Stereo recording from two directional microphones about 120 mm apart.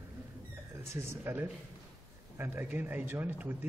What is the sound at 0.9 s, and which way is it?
A man's voice, 20° right (ahead or behind).